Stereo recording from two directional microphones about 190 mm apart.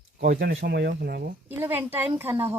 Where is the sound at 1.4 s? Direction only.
10° right (ahead or behind).